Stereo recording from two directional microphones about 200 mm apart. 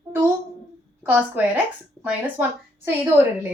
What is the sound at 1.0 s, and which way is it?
Speech, 10° right (ahead or behind).